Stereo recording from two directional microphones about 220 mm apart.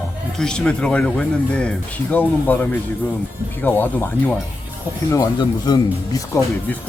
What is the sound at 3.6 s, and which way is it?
Speech, 10° left (ahead or behind).